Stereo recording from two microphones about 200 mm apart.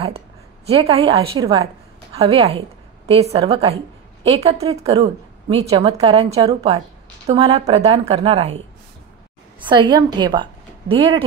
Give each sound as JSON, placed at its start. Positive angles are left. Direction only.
{"t": 0.7, "sound": "a woman's voice", "side_deg": -30}
{"t": 9.7, "sound": "a woman's voice", "side_deg": -20}